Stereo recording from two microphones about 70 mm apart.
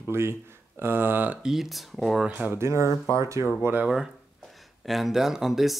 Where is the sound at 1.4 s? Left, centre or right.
Centre.